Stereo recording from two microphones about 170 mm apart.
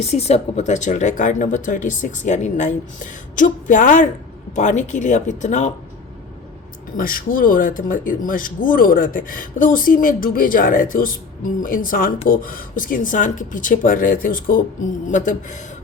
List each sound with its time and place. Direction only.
0.0 s speech: 40° left (ahead or behind)
6.9 s speech: 55° left (ahead or behind)